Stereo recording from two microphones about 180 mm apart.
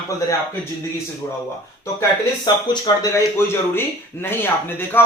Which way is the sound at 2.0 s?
20° left (ahead or behind).